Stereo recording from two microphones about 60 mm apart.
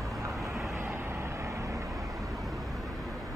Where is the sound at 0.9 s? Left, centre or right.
Right.